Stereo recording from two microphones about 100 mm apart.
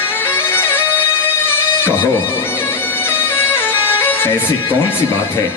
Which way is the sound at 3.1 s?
20° left (ahead or behind).